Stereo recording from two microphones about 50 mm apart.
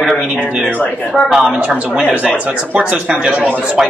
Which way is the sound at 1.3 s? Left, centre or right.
Centre.